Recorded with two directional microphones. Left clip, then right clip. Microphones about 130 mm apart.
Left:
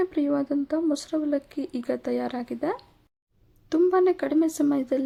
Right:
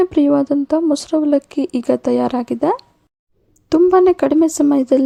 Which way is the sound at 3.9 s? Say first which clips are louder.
Right 11 dB; 50° right (ahead or behind).